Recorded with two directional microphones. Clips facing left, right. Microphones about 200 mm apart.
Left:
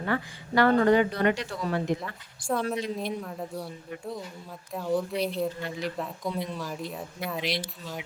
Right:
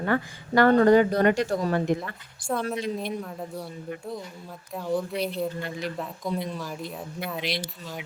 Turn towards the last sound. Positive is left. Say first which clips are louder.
# right 1 dB
turn(degrees=0)  # may be behind; listen again after turning